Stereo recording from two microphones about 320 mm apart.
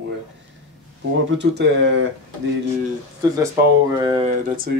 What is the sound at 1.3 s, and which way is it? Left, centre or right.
Speech, right.